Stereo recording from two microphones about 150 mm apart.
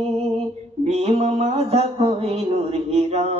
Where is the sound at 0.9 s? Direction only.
45° right (ahead or behind).